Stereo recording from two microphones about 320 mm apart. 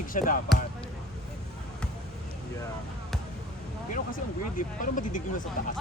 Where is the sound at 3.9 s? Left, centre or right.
Left.